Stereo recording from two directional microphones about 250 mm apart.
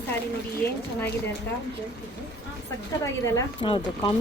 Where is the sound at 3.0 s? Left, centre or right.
Centre.